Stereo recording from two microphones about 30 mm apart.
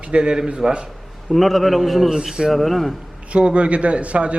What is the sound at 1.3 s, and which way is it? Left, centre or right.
Speech, centre.